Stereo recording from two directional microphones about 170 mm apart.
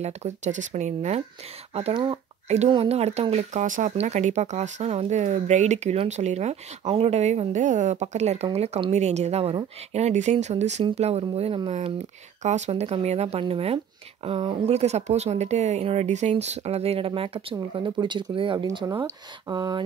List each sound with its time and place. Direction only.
0.0 s speech: 40° right (ahead or behind); by 19.8 s 25° right (ahead or behind)